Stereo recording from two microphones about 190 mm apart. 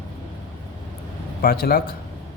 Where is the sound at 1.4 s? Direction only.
50° left (ahead or behind).